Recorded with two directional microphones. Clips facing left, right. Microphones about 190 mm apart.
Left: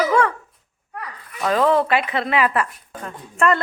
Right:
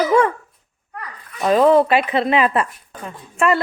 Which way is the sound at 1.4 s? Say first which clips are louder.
Right 5 dB; 20° right (ahead or behind).